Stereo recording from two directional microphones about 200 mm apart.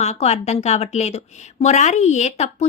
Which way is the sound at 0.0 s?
35° left (ahead or behind).